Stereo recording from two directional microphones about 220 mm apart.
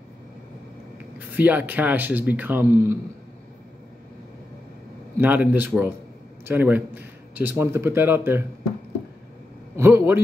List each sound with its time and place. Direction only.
1.3 s a man's voice: 5° right (ahead or behind)
5.2 s a man's voice: 5° right (ahead or behind)
9.8 s a man's voice: 10° right (ahead or behind)